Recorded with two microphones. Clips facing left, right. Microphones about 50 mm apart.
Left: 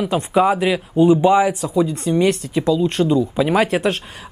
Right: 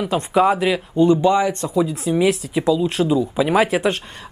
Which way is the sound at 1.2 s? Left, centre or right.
Centre.